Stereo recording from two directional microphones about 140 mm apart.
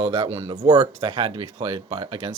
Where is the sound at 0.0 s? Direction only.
40° right (ahead or behind).